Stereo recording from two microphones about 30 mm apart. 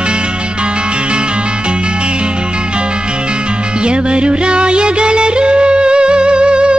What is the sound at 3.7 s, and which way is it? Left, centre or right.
Music, right.